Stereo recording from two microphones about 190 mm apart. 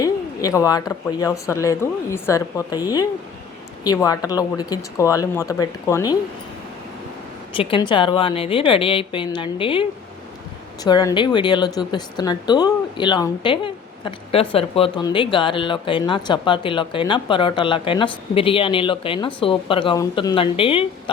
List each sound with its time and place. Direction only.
0.0 s speech: 20° left (ahead or behind)
7.5 s speech: 30° left (ahead or behind)
10.8 s a woman's voice: 20° left (ahead or behind)